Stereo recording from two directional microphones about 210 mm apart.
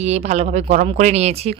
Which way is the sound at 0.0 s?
30° right (ahead or behind).